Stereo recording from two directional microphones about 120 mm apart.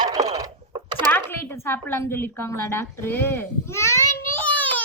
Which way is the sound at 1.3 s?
15° left (ahead or behind).